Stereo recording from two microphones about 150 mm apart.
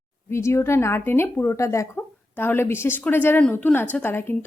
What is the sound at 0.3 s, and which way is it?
Speech, 20° left (ahead or behind).